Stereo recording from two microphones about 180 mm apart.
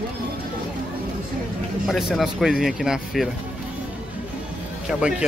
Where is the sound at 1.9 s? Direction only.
Centre (ahead or behind).